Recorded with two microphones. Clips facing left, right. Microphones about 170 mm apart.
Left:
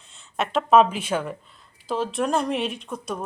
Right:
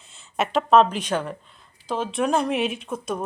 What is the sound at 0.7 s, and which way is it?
Speech, 5° left (ahead or behind).